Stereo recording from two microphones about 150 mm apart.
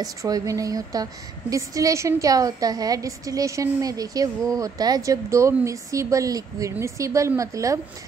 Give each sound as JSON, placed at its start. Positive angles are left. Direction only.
{"t": 0.0, "sound": "a woman's voice", "side_deg": -25}